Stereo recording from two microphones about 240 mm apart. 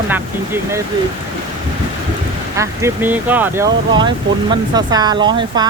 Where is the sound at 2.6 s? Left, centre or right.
Centre.